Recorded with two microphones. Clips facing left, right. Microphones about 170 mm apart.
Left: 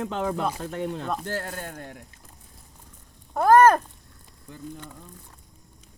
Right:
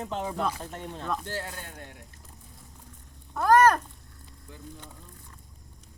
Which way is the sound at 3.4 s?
50° left (ahead or behind).